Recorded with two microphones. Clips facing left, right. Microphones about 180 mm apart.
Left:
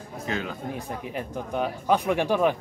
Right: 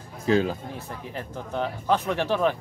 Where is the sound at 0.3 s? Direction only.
30° right (ahead or behind).